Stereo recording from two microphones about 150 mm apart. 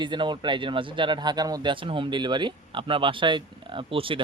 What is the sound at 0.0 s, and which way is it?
Speech, 30° right (ahead or behind).